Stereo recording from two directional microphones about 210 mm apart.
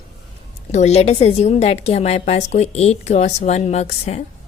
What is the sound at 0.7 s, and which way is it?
Speech, 35° left (ahead or behind).